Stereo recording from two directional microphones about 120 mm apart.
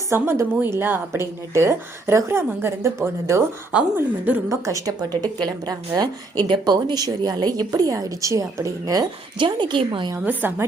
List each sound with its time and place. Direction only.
0.1 s a woman's voice: 20° right (ahead or behind)
9.4 s a woman's voice: 40° right (ahead or behind)
10.2 s a woman's voice: 15° right (ahead or behind)